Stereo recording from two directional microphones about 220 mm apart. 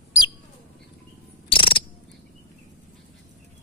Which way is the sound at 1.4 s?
25° left (ahead or behind).